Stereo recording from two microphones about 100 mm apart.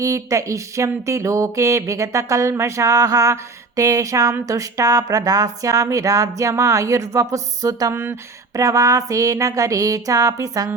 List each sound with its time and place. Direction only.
0.0 s speech: 30° right (ahead or behind)